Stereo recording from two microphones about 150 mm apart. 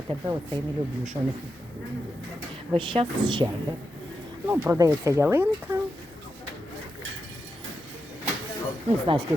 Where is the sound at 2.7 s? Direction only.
35° right (ahead or behind).